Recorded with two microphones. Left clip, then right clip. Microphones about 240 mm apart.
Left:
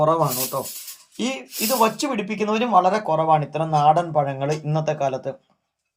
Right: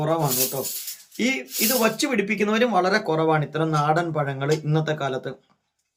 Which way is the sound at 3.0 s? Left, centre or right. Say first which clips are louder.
Left 2 dB; right.